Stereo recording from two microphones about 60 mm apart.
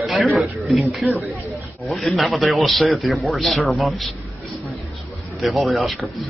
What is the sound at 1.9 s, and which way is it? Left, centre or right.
Speech, centre.